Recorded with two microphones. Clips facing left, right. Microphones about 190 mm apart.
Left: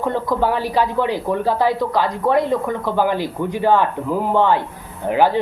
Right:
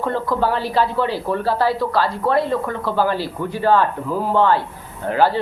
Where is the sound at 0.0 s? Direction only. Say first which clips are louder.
Left 1 dB; 15° left (ahead or behind).